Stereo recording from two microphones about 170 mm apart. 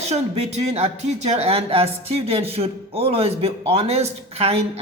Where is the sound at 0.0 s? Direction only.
40° right (ahead or behind).